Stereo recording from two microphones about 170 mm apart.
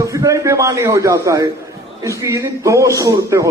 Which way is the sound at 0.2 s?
20° right (ahead or behind).